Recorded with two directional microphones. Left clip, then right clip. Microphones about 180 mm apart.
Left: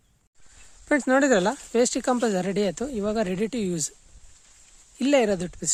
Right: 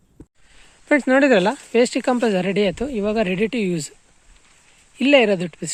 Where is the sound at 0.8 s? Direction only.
15° left (ahead or behind).